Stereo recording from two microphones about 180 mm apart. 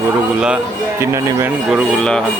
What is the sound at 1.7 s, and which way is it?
Speech, centre (ahead or behind).